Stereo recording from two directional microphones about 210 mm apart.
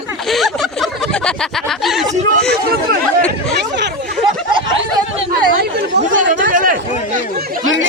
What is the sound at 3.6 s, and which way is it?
Speech, 55° right (ahead or behind).